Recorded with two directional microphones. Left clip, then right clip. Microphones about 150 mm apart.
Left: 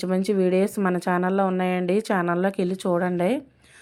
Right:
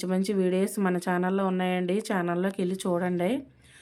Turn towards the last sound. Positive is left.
turn(degrees=30)  # may be behind; listen again after turning